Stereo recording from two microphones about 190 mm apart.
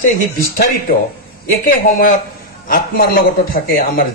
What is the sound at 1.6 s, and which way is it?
Speech, 50° left (ahead or behind).